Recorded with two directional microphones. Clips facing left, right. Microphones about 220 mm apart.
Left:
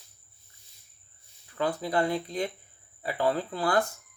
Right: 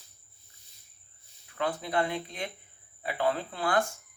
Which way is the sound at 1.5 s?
35° left (ahead or behind).